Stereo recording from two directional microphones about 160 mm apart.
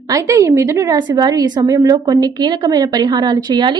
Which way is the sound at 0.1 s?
20° right (ahead or behind).